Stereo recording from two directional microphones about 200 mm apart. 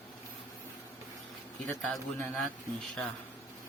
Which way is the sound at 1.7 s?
5° left (ahead or behind).